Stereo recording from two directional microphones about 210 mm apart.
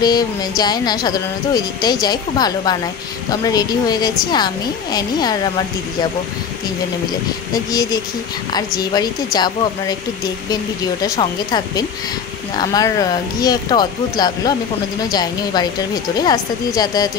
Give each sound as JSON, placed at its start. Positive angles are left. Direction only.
{"t": 0.0, "sound": "speech", "side_deg": 20}
{"t": 7.5, "sound": "speech", "side_deg": 15}